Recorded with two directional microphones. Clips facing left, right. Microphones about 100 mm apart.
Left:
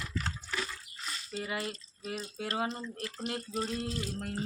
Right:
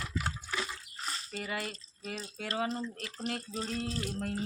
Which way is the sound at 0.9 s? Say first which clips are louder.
Right 2 dB; 35° right (ahead or behind).